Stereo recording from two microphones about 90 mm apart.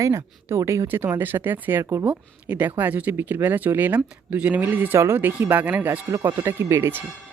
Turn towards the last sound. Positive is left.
turn(degrees=-30)  # may be behind; listen again after turning